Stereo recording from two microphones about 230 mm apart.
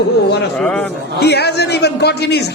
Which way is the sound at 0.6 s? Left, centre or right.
Centre.